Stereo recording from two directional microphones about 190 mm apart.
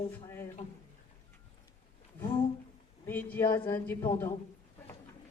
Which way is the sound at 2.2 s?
25° left (ahead or behind).